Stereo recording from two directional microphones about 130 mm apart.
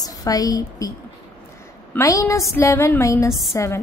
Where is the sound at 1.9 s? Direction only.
25° left (ahead or behind).